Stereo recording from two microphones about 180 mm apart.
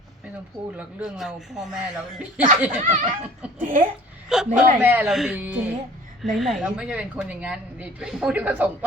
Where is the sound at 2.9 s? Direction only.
45° right (ahead or behind).